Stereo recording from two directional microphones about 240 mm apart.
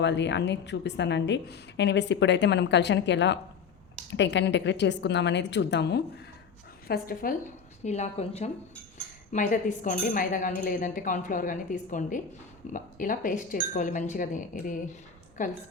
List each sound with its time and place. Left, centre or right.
0.0 s a woman's voice: left